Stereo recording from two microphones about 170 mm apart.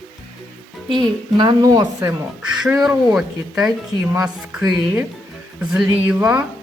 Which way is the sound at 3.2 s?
5° right (ahead or behind).